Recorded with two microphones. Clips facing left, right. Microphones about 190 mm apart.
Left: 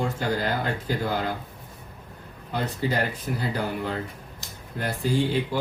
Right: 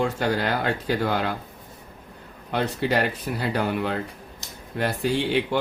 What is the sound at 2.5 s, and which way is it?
Speech, 75° right (ahead or behind).